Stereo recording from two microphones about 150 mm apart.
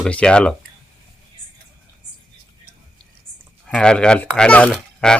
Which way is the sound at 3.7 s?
5° left (ahead or behind).